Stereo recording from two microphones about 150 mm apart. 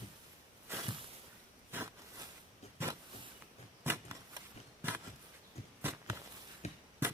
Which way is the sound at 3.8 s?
15° right (ahead or behind).